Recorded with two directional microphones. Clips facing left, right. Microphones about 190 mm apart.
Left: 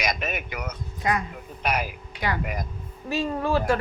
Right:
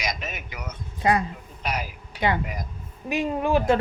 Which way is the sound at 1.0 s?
30° right (ahead or behind).